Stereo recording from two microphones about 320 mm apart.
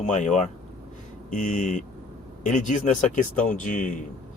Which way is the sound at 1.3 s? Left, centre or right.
Left.